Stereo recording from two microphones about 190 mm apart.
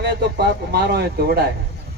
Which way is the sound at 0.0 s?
60° right (ahead or behind).